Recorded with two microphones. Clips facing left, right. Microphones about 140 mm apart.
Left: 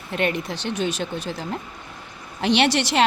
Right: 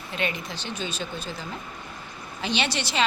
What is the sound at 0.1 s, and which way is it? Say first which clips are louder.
A woman's voice: left 6 dB; 60° left (ahead or behind).